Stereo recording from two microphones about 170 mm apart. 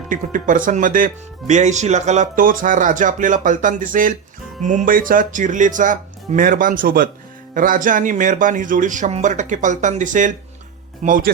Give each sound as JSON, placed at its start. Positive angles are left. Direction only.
{"t": 0.1, "sound": "speech", "side_deg": -50}